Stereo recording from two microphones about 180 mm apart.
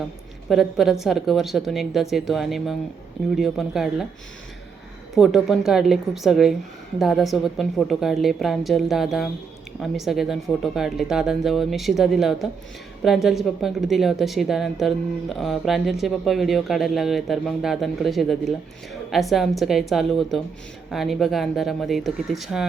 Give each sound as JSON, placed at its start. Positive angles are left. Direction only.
{"t": 0.4, "sound": "a woman's voice", "side_deg": 0}
{"t": 5.1, "sound": "a woman's voice", "side_deg": 0}